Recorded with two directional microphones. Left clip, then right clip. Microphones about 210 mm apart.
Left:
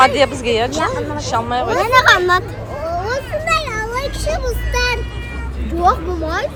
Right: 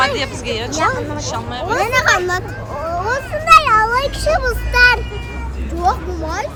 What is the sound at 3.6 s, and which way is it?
A child's voice, 30° right (ahead or behind).